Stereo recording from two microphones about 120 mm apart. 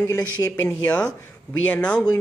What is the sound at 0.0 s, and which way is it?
Speech, 25° left (ahead or behind).